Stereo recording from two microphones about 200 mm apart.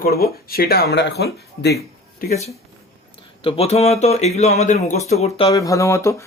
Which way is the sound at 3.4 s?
30° left (ahead or behind).